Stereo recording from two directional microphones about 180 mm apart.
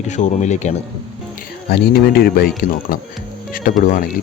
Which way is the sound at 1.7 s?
60° left (ahead or behind).